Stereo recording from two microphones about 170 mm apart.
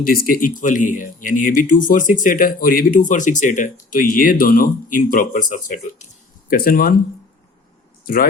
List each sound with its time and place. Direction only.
0.0 s speech: 55° left (ahead or behind)
6.5 s speech: 60° left (ahead or behind)
8.0 s speech: 55° left (ahead or behind)